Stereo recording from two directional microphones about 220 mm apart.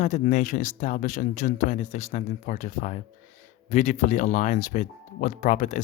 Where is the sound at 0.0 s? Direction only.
30° left (ahead or behind).